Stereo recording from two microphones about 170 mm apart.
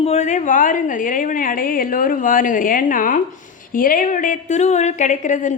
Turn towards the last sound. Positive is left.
turn(degrees=45)  # may be behind; listen again after turning